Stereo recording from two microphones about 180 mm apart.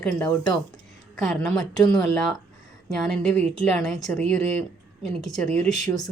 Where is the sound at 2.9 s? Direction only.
5° left (ahead or behind).